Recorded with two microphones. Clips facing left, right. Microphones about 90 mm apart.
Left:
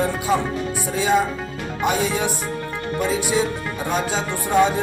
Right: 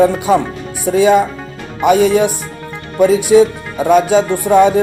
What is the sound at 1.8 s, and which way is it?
Music, 65° right (ahead or behind).